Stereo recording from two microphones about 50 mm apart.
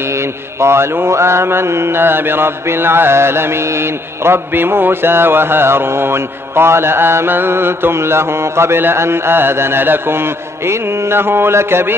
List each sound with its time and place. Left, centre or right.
0.1 s mantra: right